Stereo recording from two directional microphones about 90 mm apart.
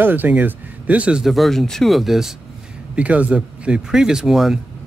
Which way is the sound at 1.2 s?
Centre (ahead or behind).